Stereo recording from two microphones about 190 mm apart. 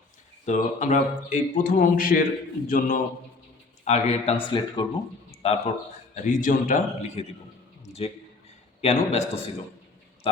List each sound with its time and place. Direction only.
0.4 s speech: 40° left (ahead or behind)
6.2 s speech: 45° left (ahead or behind)
8.8 s speech: 35° left (ahead or behind)